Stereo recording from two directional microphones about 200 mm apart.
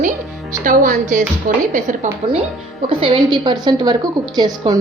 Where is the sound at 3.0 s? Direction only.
25° right (ahead or behind).